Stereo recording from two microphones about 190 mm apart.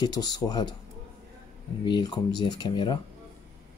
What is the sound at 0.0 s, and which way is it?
Speech, 20° left (ahead or behind).